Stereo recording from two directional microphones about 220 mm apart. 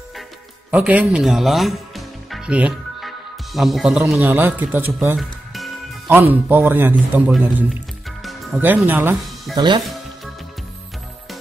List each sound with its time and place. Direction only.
0.7 s music: 5° right (ahead or behind)
4.2 s a man's voice: 10° right (ahead or behind)
9.6 s speech: 20° right (ahead or behind)